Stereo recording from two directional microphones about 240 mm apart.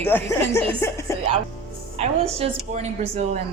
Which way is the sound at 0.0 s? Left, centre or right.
Centre.